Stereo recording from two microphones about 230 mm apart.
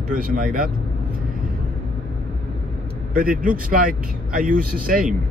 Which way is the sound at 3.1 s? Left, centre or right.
Right.